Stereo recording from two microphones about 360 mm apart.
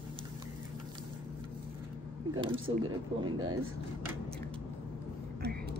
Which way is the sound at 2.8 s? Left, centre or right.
Right.